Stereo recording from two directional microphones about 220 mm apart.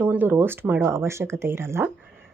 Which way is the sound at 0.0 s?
10° right (ahead or behind).